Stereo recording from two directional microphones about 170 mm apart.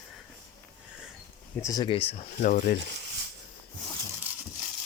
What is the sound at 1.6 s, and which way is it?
Speech, 25° left (ahead or behind).